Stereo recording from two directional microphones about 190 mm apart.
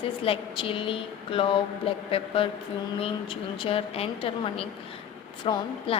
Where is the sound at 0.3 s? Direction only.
25° left (ahead or behind).